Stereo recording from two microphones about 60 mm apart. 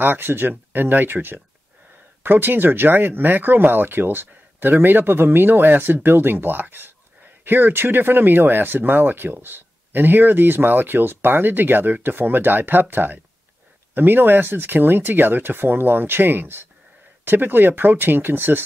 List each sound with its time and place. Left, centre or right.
0.0 s speech: right